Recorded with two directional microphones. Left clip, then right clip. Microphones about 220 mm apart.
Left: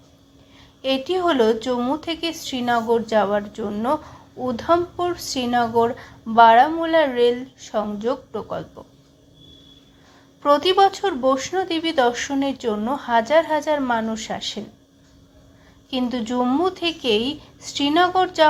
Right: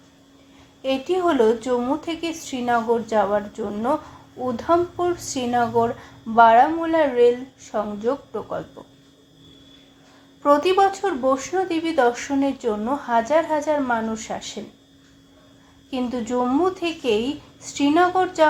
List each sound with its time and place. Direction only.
0.8 s a woman's voice: 15° left (ahead or behind)
10.5 s a woman's voice: 15° left (ahead or behind)
15.9 s a woman's voice: 15° left (ahead or behind)